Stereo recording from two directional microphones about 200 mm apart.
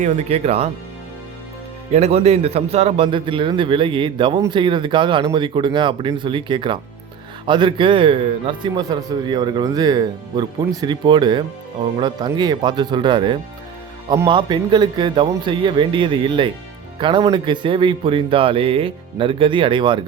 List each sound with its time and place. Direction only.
0.0 s speech: 30° right (ahead or behind)
1.9 s a man's voice: 30° right (ahead or behind)